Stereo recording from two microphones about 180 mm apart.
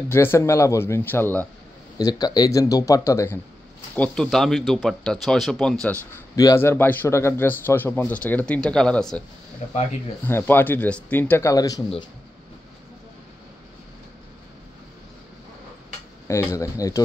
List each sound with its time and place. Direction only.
0.1 s a man's voice: 15° left (ahead or behind)
2.0 s speech: 20° left (ahead or behind); by 6.2 s 5° left (ahead or behind)
6.3 s a man's voice: 15° left (ahead or behind)
10.2 s a man's voice: 10° left (ahead or behind)
16.3 s a man's voice: 15° left (ahead or behind)